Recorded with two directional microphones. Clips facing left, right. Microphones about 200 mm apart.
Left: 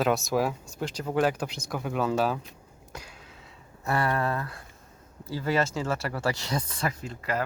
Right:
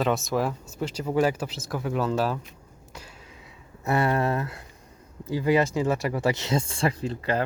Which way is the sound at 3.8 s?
25° right (ahead or behind).